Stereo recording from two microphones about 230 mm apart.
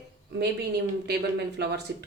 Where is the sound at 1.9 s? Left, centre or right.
Right.